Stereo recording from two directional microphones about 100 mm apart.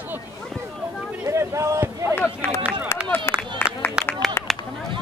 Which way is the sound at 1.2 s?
30° right (ahead or behind).